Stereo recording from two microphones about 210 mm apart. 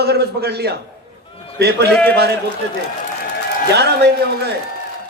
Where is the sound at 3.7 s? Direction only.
50° right (ahead or behind).